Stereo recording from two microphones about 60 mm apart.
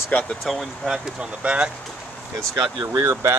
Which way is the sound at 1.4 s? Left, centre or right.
Centre.